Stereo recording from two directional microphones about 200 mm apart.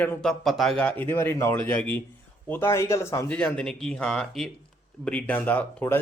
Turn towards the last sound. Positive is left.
turn(degrees=10)  # may be behind; listen again after turning